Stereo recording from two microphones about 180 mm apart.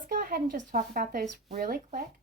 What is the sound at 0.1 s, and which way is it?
Speech, 55° right (ahead or behind).